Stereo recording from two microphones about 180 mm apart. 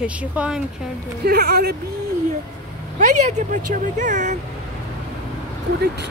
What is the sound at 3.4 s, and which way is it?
Speech, 45° right (ahead or behind).